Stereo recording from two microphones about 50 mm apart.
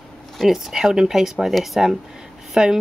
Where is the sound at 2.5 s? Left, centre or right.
Centre.